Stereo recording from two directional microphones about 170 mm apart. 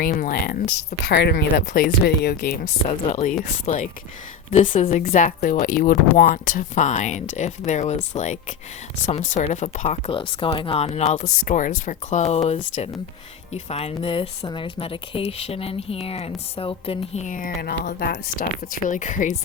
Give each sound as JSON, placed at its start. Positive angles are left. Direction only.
{"t": 0.0, "sound": "speech", "side_deg": 60}
{"t": 1.0, "sound": "speech", "side_deg": 75}
{"t": 17.8, "sound": "speech", "side_deg": 60}